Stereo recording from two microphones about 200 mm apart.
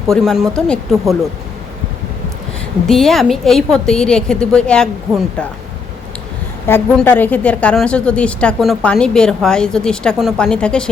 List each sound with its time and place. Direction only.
0.1 s a woman's voice: centre (ahead or behind)
2.8 s a woman's voice: centre (ahead or behind)
6.7 s a woman's voice: 10° left (ahead or behind)